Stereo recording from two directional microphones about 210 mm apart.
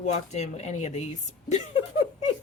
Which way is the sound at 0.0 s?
35° left (ahead or behind).